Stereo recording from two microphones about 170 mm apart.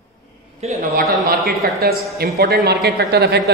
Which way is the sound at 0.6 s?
40° right (ahead or behind).